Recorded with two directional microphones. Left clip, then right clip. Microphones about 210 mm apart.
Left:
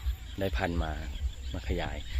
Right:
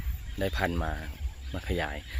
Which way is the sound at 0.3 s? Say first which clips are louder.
Right 2 dB; 5° right (ahead or behind).